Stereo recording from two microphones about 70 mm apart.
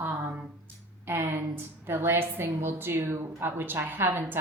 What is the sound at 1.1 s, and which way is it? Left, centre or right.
A woman's voice, right.